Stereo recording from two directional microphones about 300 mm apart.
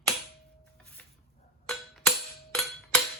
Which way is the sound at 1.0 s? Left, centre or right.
Centre.